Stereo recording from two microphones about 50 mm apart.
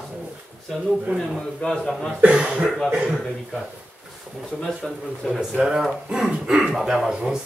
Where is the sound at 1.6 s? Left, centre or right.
Centre.